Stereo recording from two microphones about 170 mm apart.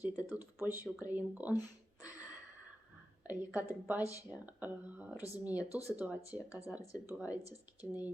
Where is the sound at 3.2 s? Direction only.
10° right (ahead or behind).